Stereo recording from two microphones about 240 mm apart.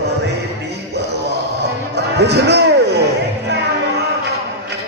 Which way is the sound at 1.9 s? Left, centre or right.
Right.